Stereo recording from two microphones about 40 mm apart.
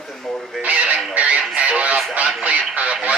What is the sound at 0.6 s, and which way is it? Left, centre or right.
Speech, right.